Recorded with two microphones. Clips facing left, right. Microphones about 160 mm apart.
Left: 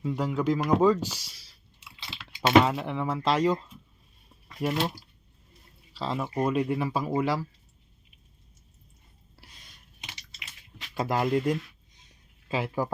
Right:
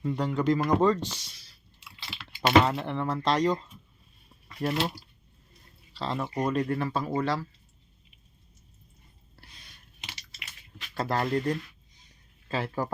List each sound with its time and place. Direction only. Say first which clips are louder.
0.0 s speech: even; 5° left (ahead or behind)
1.4 s chewing: even; 30° left (ahead or behind)
2.1 s speech: left 1 dB; 5° left (ahead or behind)
4.4 s a sound: left 1 dB; 5° left (ahead or behind)
5.9 s speech: left 1 dB; 5° left (ahead or behind)
9.4 s a sound: even; 5° left (ahead or behind)
10.0 s typing: right 1 dB; 15° left (ahead or behind)
10.8 s speech: left 1 dB; 10° left (ahead or behind)